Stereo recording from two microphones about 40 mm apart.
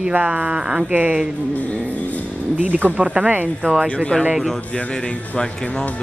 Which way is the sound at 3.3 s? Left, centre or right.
Right.